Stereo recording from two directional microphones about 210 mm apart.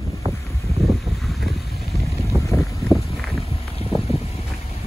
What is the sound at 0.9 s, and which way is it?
Boat, centre (ahead or behind).